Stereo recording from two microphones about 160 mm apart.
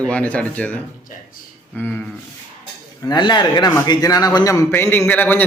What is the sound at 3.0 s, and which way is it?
A man's voice, 25° left (ahead or behind).